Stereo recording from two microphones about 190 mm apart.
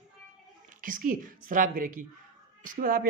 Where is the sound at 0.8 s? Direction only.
45° right (ahead or behind).